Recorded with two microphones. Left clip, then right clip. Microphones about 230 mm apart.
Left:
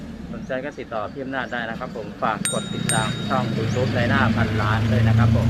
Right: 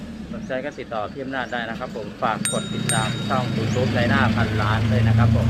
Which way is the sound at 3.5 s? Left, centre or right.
Right.